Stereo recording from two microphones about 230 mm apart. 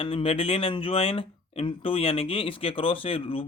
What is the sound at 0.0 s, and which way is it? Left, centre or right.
Speech, left.